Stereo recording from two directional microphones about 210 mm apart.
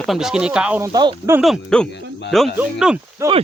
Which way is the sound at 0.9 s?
20° right (ahead or behind).